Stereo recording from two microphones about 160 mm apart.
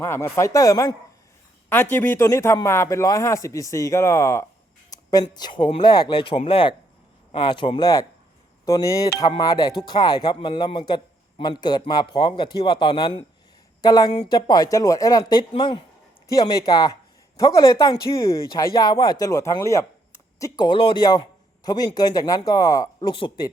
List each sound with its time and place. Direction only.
0.0 s speech: 15° left (ahead or behind)
5.2 s speech: 30° left (ahead or behind)